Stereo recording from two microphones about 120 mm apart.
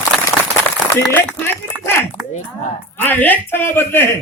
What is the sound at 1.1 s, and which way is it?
A man's voice, 15° left (ahead or behind).